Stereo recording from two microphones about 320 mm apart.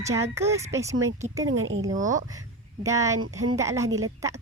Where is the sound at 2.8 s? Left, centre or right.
Centre.